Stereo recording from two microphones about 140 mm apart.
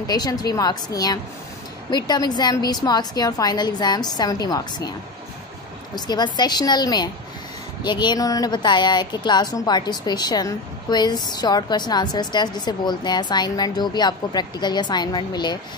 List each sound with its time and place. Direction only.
0.0 s a woman's voice: 25° left (ahead or behind)
5.9 s a woman's voice: 30° left (ahead or behind)